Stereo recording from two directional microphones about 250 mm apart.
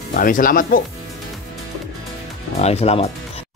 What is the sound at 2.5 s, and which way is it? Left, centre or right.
Speech, left.